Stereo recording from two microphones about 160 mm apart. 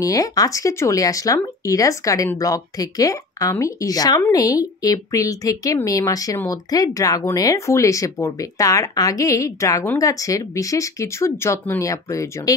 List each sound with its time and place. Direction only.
0.0 s speech: 20° left (ahead or behind)